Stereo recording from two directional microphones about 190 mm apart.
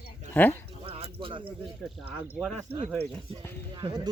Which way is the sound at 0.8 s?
30° right (ahead or behind).